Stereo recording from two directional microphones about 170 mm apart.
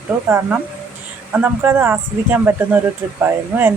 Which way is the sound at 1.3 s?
10° right (ahead or behind).